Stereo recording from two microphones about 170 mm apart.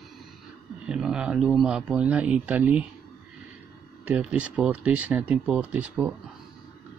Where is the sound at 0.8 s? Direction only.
5° right (ahead or behind).